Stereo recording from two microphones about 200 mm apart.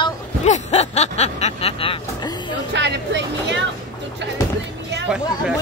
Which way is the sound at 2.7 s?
60° right (ahead or behind).